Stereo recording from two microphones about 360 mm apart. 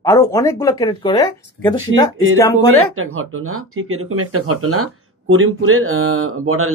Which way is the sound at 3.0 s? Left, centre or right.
Right.